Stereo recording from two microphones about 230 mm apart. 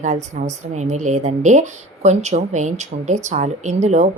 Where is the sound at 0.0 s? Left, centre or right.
Right.